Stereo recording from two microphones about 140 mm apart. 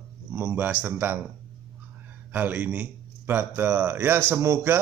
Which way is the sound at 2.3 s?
10° right (ahead or behind).